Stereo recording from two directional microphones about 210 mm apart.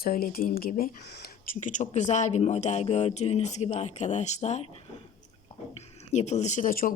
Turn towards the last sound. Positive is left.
turn(degrees=40)  # may be behind; listen again after turning